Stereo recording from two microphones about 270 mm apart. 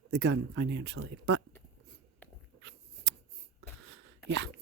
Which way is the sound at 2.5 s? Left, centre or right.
Right.